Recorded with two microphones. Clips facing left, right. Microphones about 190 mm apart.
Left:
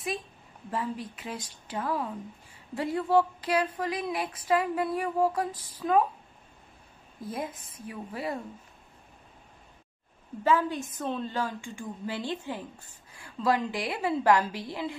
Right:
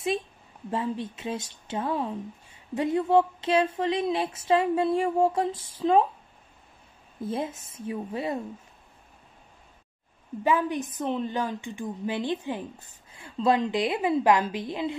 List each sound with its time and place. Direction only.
0.7 s a woman's voice: 25° right (ahead or behind)
7.2 s a woman's voice: 25° right (ahead or behind)
10.4 s a woman's voice: 15° right (ahead or behind)